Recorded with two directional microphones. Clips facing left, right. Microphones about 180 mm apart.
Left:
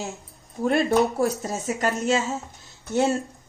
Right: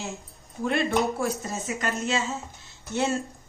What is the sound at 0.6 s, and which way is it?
Speech, 40° left (ahead or behind).